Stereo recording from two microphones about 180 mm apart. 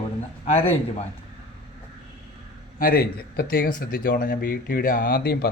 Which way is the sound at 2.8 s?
55° left (ahead or behind).